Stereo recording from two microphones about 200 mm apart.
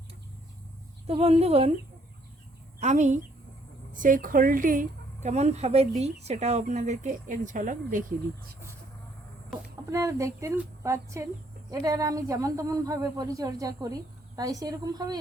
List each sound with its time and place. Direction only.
1.0 s speech: 30° right (ahead or behind)
2.8 s speech: 35° right (ahead or behind)
9.9 s a woman's voice: 15° right (ahead or behind)